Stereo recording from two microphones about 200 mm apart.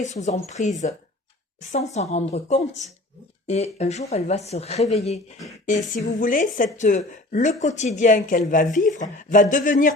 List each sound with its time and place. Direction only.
0.0 s speech: 35° left (ahead or behind)